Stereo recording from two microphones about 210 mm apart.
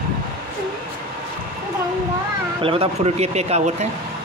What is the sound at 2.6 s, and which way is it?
Speech, 25° right (ahead or behind).